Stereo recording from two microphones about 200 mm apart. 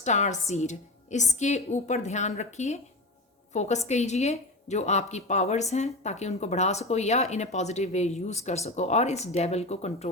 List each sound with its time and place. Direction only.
0.0 s a woman's voice: 35° left (ahead or behind)